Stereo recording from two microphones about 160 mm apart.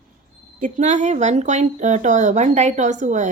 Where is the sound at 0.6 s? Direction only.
50° right (ahead or behind).